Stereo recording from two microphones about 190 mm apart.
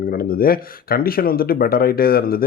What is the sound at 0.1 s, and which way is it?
Speech, 50° left (ahead or behind).